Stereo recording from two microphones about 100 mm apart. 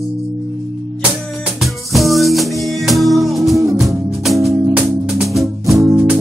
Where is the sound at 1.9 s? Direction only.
Centre (ahead or behind).